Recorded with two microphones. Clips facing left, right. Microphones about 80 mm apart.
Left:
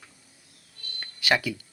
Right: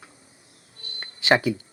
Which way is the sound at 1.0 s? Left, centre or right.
Right.